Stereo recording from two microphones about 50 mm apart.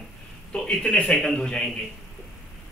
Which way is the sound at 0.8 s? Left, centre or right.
Left.